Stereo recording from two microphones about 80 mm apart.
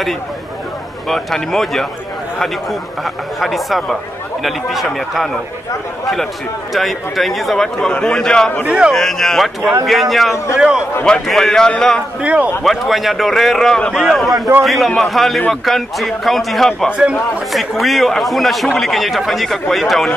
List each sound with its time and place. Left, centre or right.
1.0 s a man's voice: centre
6.7 s a man's voice: centre
8.6 s a man's voice: centre
8.9 s a man's voice: centre
12.2 s a man's voice: centre
12.6 s a man's voice: centre
16.9 s a man's voice: centre
17.5 s a man's voice: centre